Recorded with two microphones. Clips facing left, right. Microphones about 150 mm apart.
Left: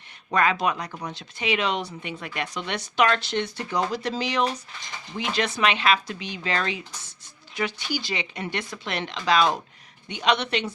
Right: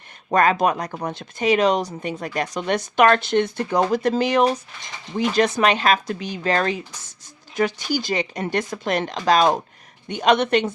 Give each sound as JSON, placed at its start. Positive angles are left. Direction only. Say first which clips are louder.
{"t": 0.3, "sound": "speech", "louder": "right 5 dB", "side_deg": -45}